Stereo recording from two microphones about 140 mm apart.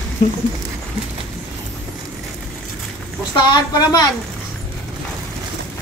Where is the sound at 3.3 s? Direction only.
30° left (ahead or behind).